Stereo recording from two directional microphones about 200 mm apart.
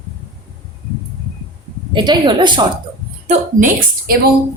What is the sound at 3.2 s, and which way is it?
Speech, 45° right (ahead or behind).